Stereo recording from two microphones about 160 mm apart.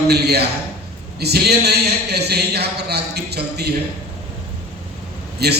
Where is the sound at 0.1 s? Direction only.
90° right.